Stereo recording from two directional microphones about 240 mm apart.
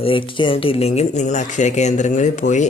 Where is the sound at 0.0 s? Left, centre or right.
Left.